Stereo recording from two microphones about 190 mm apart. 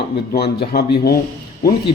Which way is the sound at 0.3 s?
55° left (ahead or behind).